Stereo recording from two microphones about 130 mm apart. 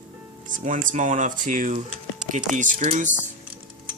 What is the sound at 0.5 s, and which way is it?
Speech, 85° right.